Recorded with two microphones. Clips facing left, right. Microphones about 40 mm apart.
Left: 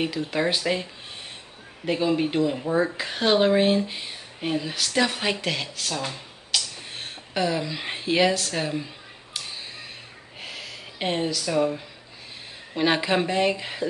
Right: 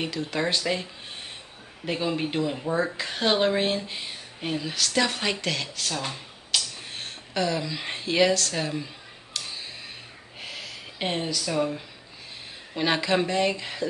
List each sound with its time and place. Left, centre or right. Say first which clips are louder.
0.0 s speech: left 3 dB; centre
1.9 s speech: left 4 dB; centre
9.3 s a sound: even; centre
10.4 s gasp: left 1 dB; centre
12.7 s speech: left 2 dB; centre